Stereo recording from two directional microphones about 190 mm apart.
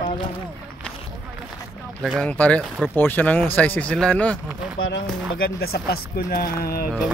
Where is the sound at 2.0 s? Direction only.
Centre (ahead or behind).